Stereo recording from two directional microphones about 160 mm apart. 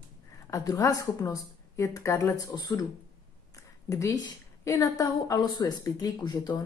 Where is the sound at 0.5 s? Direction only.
20° left (ahead or behind).